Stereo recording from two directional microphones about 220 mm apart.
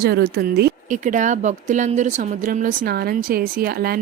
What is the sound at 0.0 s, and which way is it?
A woman's voice, 45° right (ahead or behind).